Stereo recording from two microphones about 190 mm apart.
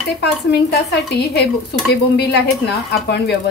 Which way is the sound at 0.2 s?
60° left (ahead or behind).